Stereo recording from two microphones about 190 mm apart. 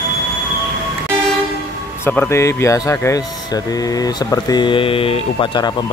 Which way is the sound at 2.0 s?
10° left (ahead or behind).